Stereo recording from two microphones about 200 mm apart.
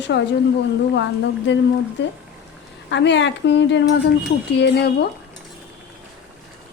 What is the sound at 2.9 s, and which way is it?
A woman's voice, 65° left (ahead or behind).